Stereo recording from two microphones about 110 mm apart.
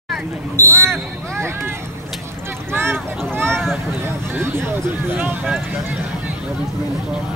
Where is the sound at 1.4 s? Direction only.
25° right (ahead or behind).